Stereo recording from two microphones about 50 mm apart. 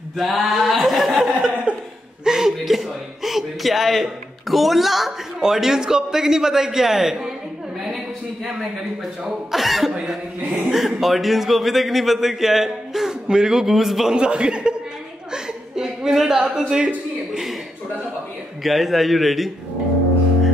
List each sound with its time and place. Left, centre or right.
0.2 s a sound: centre
2.2 s a man's voice: centre
9.2 s a man's voice: centre
14.1 s speech: centre
15.3 s chuckle: centre
16.4 s a sound: centre
18.6 s a man's voice: centre